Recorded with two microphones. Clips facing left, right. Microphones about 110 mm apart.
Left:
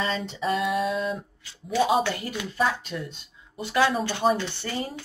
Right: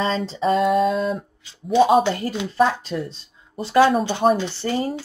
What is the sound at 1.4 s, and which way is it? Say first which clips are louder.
Speech: right 8 dB; 20° right (ahead or behind).